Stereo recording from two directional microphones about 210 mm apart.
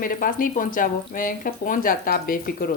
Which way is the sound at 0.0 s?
40° left (ahead or behind).